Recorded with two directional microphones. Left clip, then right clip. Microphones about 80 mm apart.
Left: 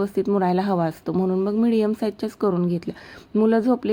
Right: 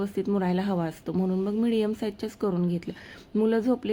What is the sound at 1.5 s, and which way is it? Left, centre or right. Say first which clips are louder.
A woman's voice: left 5 dB; left.